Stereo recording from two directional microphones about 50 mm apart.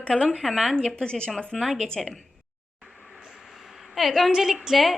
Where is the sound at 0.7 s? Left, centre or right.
Centre.